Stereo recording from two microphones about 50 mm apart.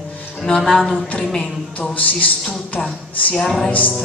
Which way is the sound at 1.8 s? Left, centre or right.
Left.